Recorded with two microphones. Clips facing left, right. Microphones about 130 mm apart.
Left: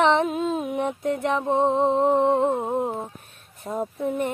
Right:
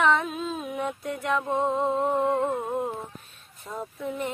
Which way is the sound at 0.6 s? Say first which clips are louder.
Left 5 dB; 25° left (ahead or behind).